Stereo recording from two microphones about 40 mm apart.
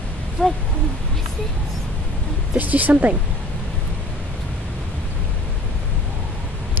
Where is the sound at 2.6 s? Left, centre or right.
Right.